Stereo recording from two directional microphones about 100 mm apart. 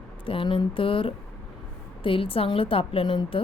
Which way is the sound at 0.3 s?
60° left (ahead or behind).